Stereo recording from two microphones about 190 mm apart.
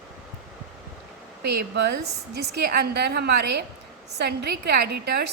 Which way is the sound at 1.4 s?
60° right (ahead or behind).